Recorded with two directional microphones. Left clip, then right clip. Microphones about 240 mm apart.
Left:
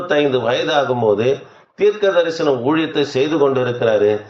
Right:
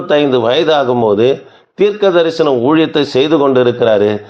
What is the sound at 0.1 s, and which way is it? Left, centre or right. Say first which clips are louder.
A man's voice: right 5 dB; right.